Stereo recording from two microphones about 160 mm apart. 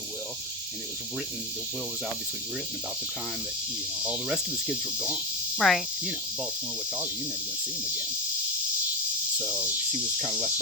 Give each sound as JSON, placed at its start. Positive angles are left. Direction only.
{"t": 4.0, "sound": "cricket", "side_deg": -10}
{"t": 5.5, "sound": "insect", "side_deg": 0}
{"t": 9.4, "sound": "cricket", "side_deg": -10}